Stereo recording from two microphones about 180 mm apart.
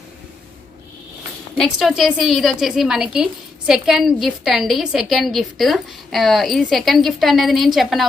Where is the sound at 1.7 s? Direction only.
Centre (ahead or behind).